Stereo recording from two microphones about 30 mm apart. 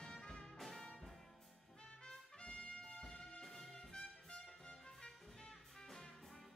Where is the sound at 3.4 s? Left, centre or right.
Centre.